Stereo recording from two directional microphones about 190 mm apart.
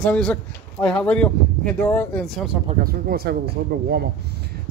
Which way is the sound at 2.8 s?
55° right (ahead or behind).